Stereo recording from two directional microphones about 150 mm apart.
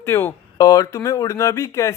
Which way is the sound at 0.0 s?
20° left (ahead or behind).